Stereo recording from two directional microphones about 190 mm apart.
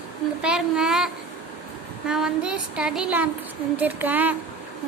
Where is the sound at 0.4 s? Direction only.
5° right (ahead or behind).